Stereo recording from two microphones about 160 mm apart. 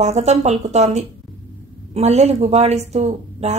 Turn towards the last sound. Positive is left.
turn(degrees=-45)  # may be behind; listen again after turning